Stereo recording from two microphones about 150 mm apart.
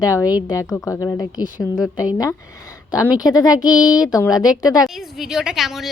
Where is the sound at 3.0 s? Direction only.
25° left (ahead or behind).